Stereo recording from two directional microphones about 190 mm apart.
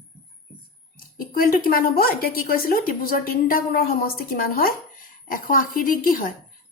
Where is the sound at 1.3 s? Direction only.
50° left (ahead or behind).